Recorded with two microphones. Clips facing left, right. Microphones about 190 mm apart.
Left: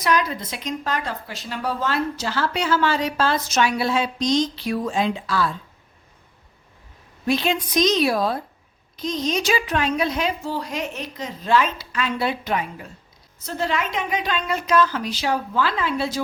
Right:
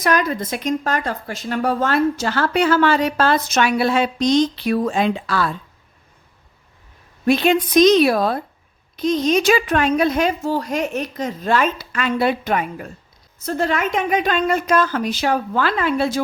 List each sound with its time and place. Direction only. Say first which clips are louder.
0.0 s speech: right 3 dB; 50° right (ahead or behind)
7.3 s a woman's voice: right 6 dB; 60° right (ahead or behind)